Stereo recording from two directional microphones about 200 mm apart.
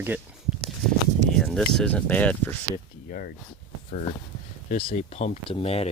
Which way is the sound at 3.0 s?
45° left (ahead or behind).